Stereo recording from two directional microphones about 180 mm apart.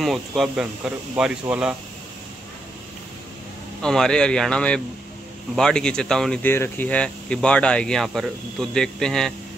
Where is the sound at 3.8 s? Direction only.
5° left (ahead or behind).